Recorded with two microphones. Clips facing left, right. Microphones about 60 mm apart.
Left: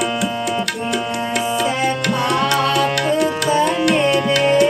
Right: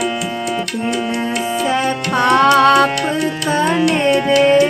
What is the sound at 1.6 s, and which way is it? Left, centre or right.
Music, right.